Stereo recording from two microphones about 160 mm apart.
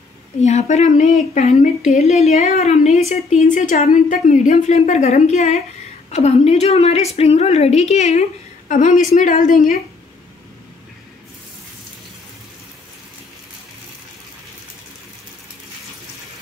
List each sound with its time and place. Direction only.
0.4 s a woman's voice: 45° left (ahead or behind)